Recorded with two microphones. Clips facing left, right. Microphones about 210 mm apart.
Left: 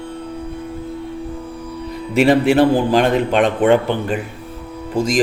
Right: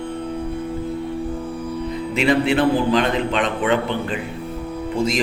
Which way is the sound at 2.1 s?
50° left (ahead or behind).